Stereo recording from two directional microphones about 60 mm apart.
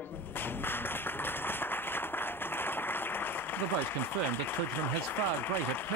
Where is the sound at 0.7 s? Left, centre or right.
Left.